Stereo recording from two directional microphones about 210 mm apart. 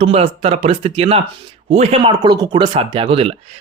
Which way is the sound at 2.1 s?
15° right (ahead or behind).